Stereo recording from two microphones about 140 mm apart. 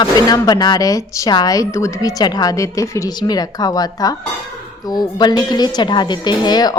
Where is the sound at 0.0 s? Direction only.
30° left (ahead or behind).